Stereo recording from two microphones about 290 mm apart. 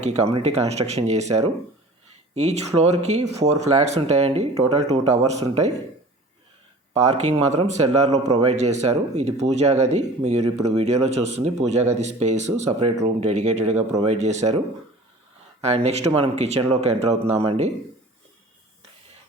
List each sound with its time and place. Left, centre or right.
0.0 s speech: right
7.0 s speech: right
15.6 s speech: right